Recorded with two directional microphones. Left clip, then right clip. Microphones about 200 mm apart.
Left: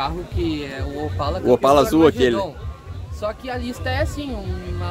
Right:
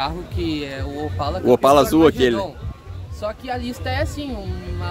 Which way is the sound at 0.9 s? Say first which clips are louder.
Left 1 dB; 5° right (ahead or behind).